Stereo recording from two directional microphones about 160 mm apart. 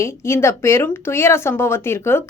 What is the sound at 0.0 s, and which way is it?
A woman's voice, 15° left (ahead or behind).